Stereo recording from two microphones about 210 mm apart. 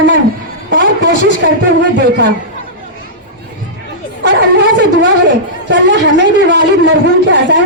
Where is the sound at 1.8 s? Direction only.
55° right (ahead or behind).